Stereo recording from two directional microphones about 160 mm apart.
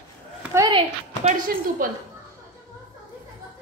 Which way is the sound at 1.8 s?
60° right (ahead or behind).